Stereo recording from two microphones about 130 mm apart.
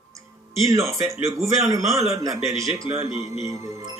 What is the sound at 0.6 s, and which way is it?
Speech, 20° right (ahead or behind).